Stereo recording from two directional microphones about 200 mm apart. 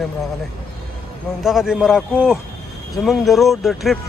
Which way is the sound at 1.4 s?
Centre (ahead or behind).